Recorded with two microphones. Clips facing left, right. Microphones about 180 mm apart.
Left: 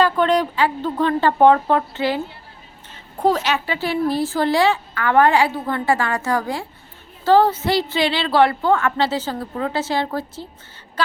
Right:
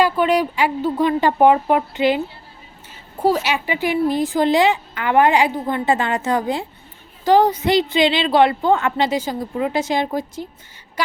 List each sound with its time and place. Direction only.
0.0 s a woman's voice: 10° right (ahead or behind)